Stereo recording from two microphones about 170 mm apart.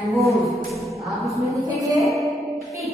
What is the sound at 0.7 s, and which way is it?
Speech, centre (ahead or behind).